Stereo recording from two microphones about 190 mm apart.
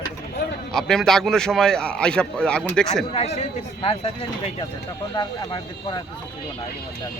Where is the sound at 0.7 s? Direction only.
Centre (ahead or behind).